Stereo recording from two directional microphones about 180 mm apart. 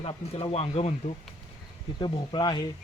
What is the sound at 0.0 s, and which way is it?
Speech, 30° left (ahead or behind).